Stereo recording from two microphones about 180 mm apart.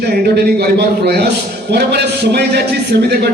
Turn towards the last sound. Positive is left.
turn(degrees=-65)  # may be behind; listen again after turning